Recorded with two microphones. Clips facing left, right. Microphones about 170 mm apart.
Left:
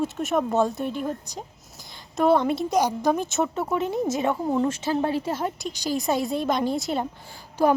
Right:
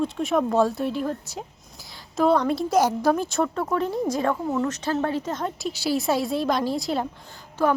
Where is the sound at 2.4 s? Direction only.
Centre (ahead or behind).